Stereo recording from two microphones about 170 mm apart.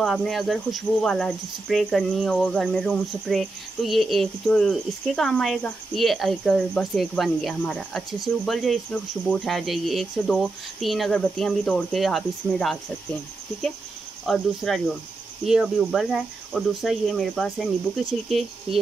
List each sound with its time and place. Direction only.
0.0 s speech: centre (ahead or behind)
14.2 s speech: centre (ahead or behind)
18.7 s speech: 35° right (ahead or behind)